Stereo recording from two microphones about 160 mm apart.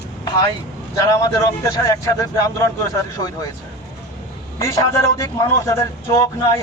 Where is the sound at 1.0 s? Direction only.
20° left (ahead or behind).